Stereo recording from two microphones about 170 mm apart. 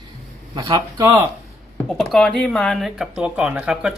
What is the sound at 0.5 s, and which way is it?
Speech, 25° right (ahead or behind).